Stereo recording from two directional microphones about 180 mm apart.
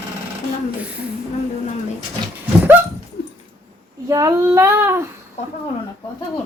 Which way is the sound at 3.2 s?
70° left (ahead or behind).